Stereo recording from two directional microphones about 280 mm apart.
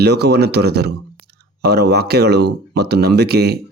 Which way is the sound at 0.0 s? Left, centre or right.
Right.